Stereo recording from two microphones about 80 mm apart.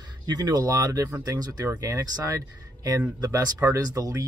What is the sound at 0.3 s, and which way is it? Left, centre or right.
Speech, right.